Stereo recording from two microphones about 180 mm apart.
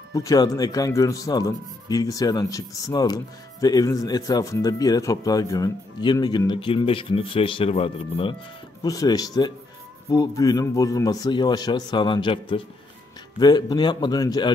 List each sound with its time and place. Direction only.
0.1 s a man's voice: 20° left (ahead or behind)